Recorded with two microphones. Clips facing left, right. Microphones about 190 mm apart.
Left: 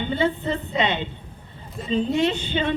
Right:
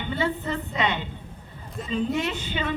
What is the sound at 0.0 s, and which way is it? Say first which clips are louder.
Speech: left 4 dB; 25° left (ahead or behind).